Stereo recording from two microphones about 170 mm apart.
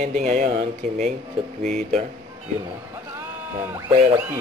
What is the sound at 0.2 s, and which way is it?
Speech, 45° right (ahead or behind).